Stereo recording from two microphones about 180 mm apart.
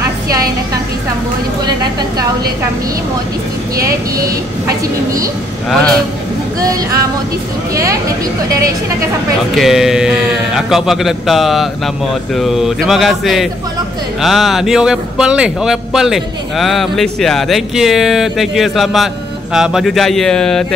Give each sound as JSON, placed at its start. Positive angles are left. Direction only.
{"t": 4.6, "sound": "a woman's voice", "side_deg": -20}
{"t": 6.6, "sound": "speech", "side_deg": -20}
{"t": 9.6, "sound": "speech", "side_deg": 0}